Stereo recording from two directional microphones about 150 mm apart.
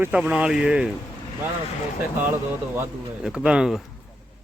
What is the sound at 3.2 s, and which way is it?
Speech, 5° right (ahead or behind).